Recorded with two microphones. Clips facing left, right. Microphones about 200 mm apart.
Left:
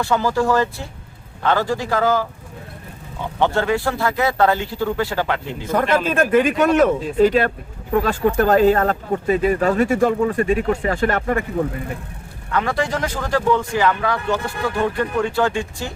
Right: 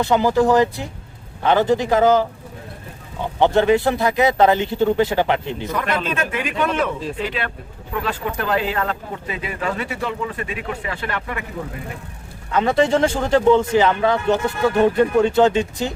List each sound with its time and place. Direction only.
0.0 s speech: 20° right (ahead or behind)
3.4 s speech: 20° right (ahead or behind)
6.3 s speech: 45° left (ahead or behind)
12.5 s speech: 20° right (ahead or behind)